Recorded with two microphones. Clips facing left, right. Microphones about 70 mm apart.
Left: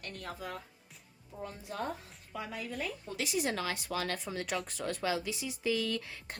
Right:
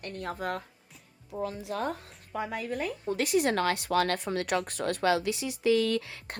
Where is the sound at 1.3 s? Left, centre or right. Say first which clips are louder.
Right 9 dB; right.